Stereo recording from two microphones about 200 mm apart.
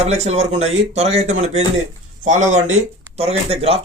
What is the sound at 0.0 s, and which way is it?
Speech, 35° right (ahead or behind).